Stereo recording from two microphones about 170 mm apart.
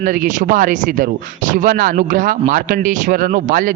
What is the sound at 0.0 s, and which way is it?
A man's voice, 50° right (ahead or behind).